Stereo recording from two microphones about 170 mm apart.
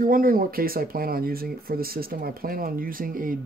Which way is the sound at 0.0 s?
55° right (ahead or behind).